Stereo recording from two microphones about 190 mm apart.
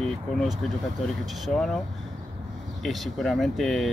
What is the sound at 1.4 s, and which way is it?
Speech, centre (ahead or behind).